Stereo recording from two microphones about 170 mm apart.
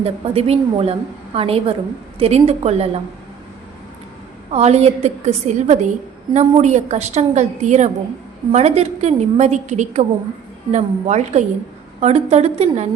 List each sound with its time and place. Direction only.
0.0 s a woman's voice: 35° right (ahead or behind)
4.5 s a woman's voice: 40° right (ahead or behind)